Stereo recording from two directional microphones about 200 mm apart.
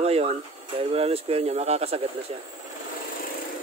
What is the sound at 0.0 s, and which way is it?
Speech, 30° right (ahead or behind).